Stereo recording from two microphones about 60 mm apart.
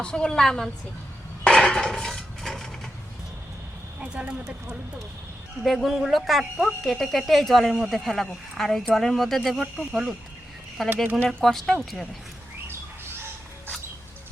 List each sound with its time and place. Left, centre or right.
0.0 s a woman's voice: centre
1.5 s a sound: centre
4.0 s speech: centre
5.6 s speech: centre